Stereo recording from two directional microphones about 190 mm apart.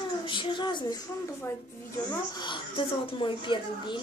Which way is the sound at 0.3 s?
25° left (ahead or behind).